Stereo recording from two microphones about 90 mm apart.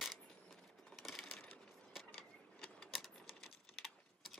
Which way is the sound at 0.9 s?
5° left (ahead or behind).